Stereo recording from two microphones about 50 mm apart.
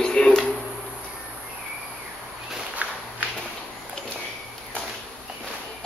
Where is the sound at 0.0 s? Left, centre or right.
Centre.